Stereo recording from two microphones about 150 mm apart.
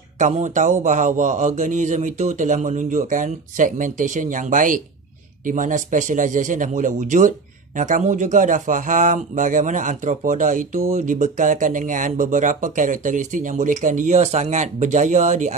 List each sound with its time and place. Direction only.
0.2 s a man's voice: 55° right (ahead or behind)